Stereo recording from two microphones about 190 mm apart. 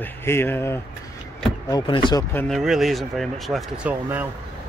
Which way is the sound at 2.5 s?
Centre (ahead or behind).